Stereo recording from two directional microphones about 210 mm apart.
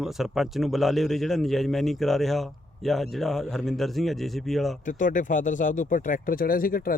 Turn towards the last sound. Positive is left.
turn(degrees=40)  # may be behind; listen again after turning